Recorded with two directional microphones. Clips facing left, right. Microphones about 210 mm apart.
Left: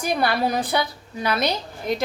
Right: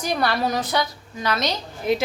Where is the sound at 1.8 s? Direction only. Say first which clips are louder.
Right 4 dB; 5° right (ahead or behind).